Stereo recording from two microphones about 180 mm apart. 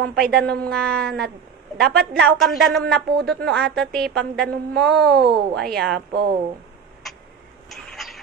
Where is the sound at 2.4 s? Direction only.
Centre (ahead or behind).